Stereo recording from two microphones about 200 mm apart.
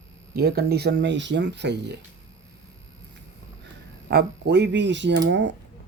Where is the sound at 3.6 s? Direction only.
55° right (ahead or behind).